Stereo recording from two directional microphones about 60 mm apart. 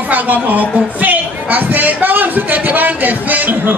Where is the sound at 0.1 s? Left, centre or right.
Right.